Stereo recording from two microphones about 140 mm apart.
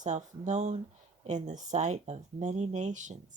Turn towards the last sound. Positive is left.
turn(degrees=-60)  # may be behind; listen again after turning